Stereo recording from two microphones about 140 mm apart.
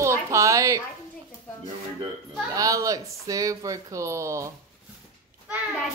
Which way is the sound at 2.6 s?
25° right (ahead or behind).